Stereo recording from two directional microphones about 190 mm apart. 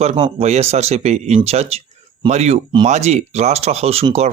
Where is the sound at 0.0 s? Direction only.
35° right (ahead or behind).